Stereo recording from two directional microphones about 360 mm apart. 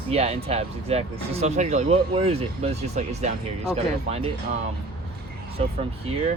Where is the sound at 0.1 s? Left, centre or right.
Centre.